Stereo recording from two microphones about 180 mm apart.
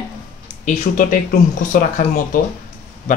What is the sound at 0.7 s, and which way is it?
Speech, 45° left (ahead or behind).